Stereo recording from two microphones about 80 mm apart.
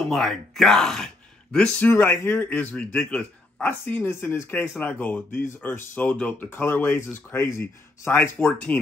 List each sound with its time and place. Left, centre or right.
0.0 s speech: centre
1.8 s a man's voice: left
3.8 s speech: left
8.4 s speech: centre